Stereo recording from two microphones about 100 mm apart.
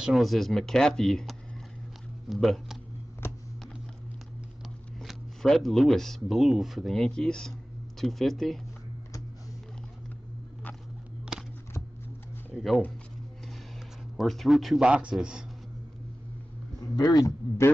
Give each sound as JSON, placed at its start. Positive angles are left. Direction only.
{"t": 0.0, "sound": "speech", "side_deg": 0}
{"t": 5.0, "sound": "speech", "side_deg": 0}
{"t": 12.5, "sound": "a sound", "side_deg": 0}
{"t": 14.1, "sound": "speech", "side_deg": 0}
{"t": 16.8, "sound": "a man's voice", "side_deg": 40}